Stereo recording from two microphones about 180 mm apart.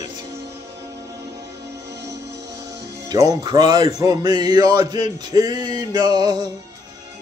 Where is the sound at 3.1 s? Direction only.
20° right (ahead or behind).